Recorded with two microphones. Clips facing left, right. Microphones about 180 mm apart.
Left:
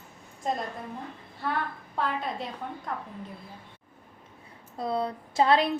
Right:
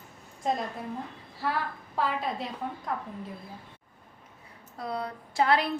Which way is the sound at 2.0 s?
Centre (ahead or behind).